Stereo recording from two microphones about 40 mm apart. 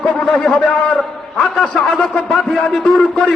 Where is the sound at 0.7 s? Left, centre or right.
Left.